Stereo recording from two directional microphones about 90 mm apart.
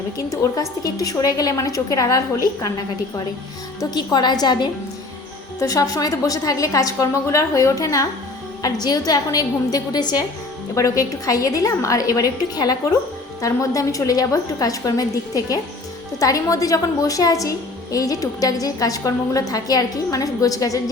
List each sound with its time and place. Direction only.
0.3 s a woman's voice: 40° left (ahead or behind)
3.8 s a woman's voice: 50° left (ahead or behind)
5.5 s a woman's voice: 40° left (ahead or behind)
10.8 s a woman's voice: 40° left (ahead or behind)